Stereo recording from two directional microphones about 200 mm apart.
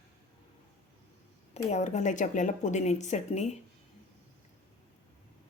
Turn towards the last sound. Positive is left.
turn(degrees=35)  # may be behind; listen again after turning